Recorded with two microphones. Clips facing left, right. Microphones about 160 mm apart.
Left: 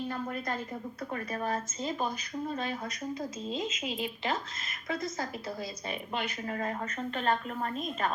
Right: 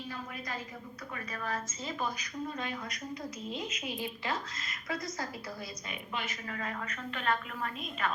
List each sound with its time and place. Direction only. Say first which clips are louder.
1.3 s a woman's voice: left 3 dB; 30° left (ahead or behind)
3.5 s a woman's voice: left 4 dB; 25° left (ahead or behind)
6.5 s a woman's voice: left 4 dB; 35° left (ahead or behind)